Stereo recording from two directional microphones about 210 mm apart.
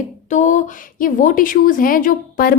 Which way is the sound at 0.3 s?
35° left (ahead or behind).